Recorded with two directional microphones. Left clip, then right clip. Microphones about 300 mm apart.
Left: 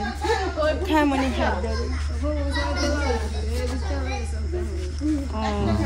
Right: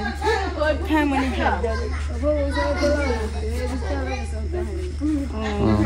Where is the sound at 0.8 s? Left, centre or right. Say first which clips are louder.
Even; left.